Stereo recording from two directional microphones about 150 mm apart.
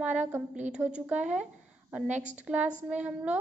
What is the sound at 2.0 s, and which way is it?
Speech, 50° right (ahead or behind).